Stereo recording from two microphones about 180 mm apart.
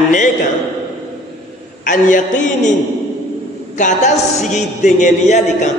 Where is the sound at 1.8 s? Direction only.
45° left (ahead or behind).